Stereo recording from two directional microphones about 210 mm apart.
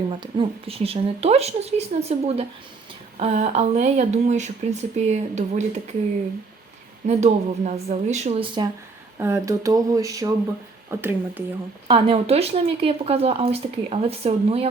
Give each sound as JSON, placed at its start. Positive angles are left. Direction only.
{"t": 0.1, "sound": "speech", "side_deg": -25}
{"t": 7.1, "sound": "speech", "side_deg": -30}
{"t": 9.1, "sound": "speech", "side_deg": -10}
{"t": 11.9, "sound": "speech", "side_deg": -25}